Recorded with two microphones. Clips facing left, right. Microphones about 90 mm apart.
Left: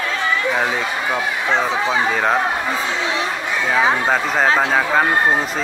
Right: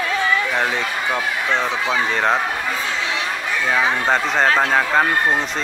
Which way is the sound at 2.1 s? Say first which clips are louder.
Left 1 dB; 5° left (ahead or behind).